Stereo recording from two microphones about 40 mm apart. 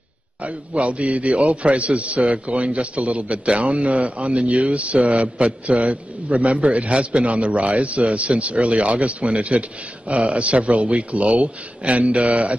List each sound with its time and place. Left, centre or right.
0.4 s a man's voice: right